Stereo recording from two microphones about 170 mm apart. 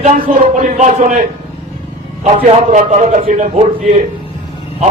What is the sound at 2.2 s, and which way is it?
A man's voice, 40° right (ahead or behind).